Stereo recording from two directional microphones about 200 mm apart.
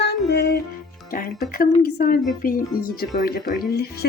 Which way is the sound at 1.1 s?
45° left (ahead or behind).